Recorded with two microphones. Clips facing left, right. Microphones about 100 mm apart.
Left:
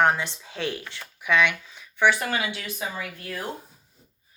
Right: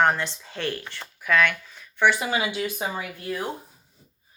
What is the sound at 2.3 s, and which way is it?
Speech, 25° right (ahead or behind).